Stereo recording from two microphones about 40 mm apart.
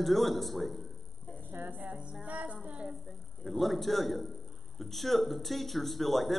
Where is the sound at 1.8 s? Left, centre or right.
Right.